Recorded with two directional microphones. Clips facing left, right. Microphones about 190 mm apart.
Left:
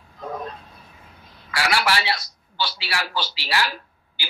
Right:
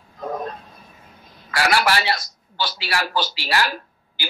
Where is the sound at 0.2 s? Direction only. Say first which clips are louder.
Right 4 dB; 45° right (ahead or behind).